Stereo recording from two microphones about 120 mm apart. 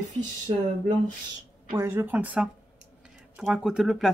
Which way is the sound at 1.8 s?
25° right (ahead or behind).